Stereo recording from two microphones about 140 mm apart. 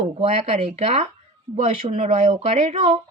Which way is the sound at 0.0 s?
45° right (ahead or behind).